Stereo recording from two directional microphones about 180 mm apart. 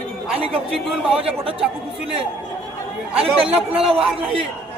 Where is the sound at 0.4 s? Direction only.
35° right (ahead or behind).